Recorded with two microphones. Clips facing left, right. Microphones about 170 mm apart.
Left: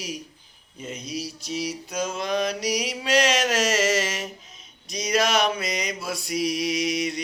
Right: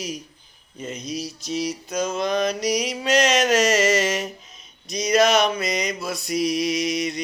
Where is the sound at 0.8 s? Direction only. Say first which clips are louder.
Right 2 dB; 5° left (ahead or behind).